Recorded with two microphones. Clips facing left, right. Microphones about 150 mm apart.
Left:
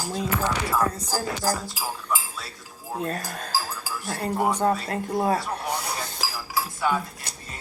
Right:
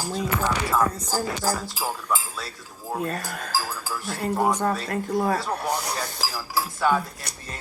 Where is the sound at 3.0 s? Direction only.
35° left (ahead or behind).